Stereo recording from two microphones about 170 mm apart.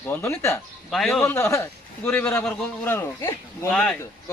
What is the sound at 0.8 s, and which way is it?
Speech, centre (ahead or behind).